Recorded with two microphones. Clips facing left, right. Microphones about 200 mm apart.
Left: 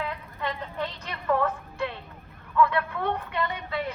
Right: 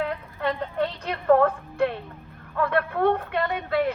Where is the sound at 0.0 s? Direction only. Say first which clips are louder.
Right 5 dB; 55° right (ahead or behind).